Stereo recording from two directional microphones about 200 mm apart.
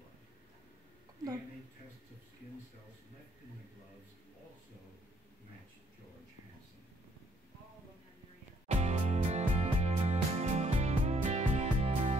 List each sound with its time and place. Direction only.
8.6 s music: 30° right (ahead or behind)